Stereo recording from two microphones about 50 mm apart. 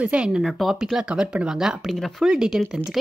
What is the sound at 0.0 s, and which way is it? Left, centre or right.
Speech, right.